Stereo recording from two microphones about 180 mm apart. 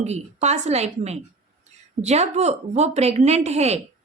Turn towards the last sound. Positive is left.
turn(degrees=-35)  # may be behind; listen again after turning